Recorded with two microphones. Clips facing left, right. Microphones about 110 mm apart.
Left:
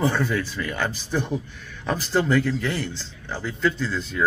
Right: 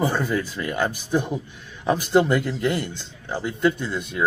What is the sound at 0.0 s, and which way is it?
Speech, 15° right (ahead or behind).